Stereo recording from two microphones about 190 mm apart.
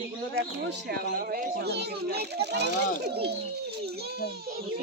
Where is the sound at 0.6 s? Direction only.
55° right (ahead or behind).